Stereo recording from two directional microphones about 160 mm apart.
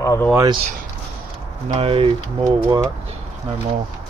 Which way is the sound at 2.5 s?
25° right (ahead or behind).